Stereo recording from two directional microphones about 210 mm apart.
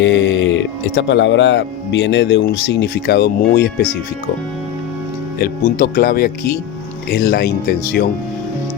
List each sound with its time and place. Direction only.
0.0 s speech: 60° left (ahead or behind)
5.4 s speech: 45° left (ahead or behind)